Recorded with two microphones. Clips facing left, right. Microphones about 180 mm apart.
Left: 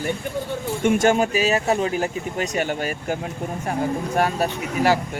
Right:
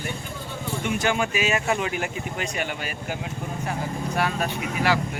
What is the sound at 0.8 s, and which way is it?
Speech, 45° left (ahead or behind).